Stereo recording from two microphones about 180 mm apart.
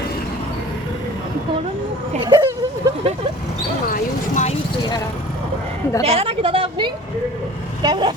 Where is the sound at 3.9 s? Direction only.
45° left (ahead or behind).